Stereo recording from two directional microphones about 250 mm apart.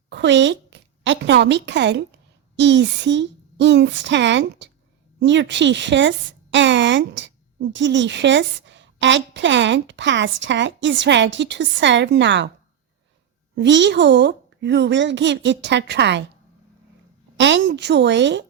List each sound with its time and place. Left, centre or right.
0.1 s a woman's voice: right
13.6 s a woman's voice: right
17.3 s a woman's voice: right